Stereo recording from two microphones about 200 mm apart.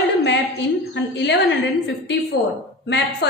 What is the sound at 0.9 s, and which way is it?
A woman's voice, 60° left (ahead or behind).